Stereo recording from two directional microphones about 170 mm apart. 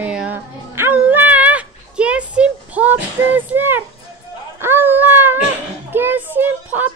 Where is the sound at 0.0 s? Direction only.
5° right (ahead or behind).